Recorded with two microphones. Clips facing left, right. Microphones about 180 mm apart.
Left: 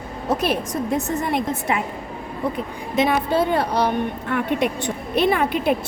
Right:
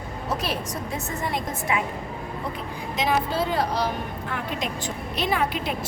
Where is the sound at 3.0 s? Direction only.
60° left (ahead or behind).